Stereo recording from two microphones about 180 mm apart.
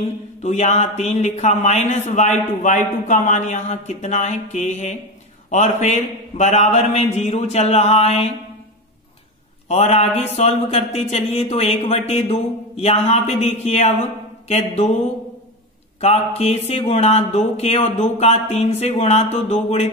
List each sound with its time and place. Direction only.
0.0 s speech: 40° left (ahead or behind)
9.7 s speech: 35° left (ahead or behind)
16.0 s speech: 35° left (ahead or behind)